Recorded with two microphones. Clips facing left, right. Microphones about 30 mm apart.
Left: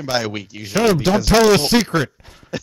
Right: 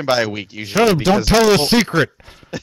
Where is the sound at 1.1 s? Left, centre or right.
Centre.